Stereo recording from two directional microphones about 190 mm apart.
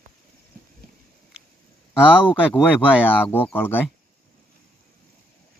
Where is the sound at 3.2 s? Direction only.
10° left (ahead or behind).